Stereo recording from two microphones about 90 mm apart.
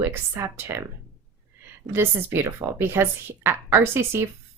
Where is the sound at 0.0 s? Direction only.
30° right (ahead or behind).